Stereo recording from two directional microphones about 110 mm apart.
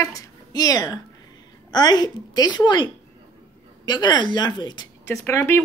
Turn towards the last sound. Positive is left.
turn(degrees=25)  # may be behind; listen again after turning